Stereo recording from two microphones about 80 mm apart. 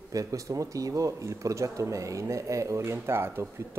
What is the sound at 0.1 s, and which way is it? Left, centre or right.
Speech, right.